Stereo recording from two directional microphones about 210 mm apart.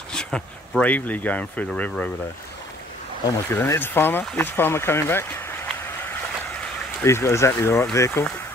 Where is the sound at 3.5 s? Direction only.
10° left (ahead or behind).